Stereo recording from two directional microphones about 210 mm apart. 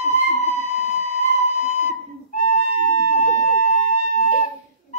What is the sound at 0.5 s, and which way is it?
Whistle, 35° left (ahead or behind).